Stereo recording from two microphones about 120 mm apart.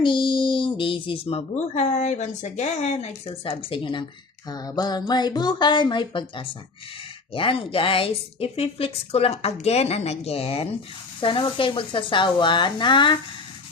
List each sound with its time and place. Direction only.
0.0 s speech: 45° left (ahead or behind); by 3.2 s 65° left (ahead or behind)
3.2 s speech: 45° left (ahead or behind)
4.4 s a woman's voice: 35° left (ahead or behind); by 10.7 s 55° left (ahead or behind)
11.2 s speech: 45° left (ahead or behind)